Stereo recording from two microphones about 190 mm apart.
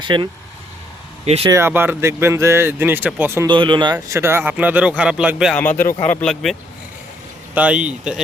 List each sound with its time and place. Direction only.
0.0 s speech: 25° right (ahead or behind)
1.5 s speech: 15° right (ahead or behind)
3.4 s speech: 25° right (ahead or behind)
3.9 s speech: 15° right (ahead or behind)
5.6 s speech: 10° left (ahead or behind); by 8.2 s 5° right (ahead or behind)